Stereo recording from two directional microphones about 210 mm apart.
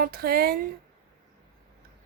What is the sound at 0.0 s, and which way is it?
Speech, 45° right (ahead or behind).